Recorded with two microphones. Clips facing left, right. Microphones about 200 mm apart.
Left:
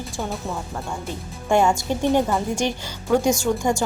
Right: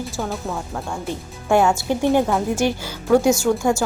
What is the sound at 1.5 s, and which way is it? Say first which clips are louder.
Speech: right 2 dB; 5° right (ahead or behind).